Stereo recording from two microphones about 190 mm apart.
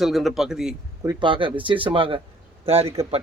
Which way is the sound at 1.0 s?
20° right (ahead or behind).